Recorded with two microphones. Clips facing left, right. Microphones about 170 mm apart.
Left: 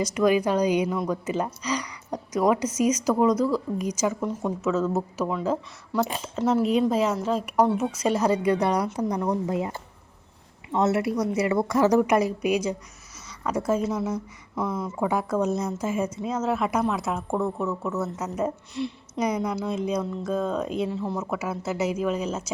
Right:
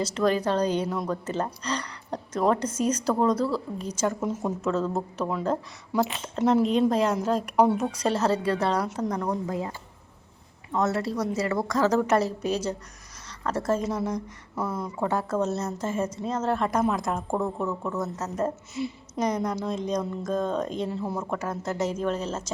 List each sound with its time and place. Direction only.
0.0 s a woman's voice: 10° left (ahead or behind)
14.5 s speech: 5° right (ahead or behind)
15.0 s a woman's voice: 10° left (ahead or behind)
19.2 s speech: 10° left (ahead or behind)